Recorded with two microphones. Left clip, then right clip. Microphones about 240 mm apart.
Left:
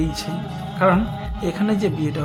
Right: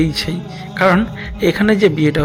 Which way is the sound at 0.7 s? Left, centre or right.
Right.